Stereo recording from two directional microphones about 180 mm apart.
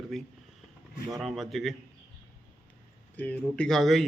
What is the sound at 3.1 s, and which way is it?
Speech, 5° left (ahead or behind).